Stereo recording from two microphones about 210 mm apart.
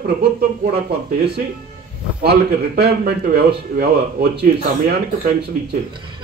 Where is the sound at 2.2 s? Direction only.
50° right (ahead or behind).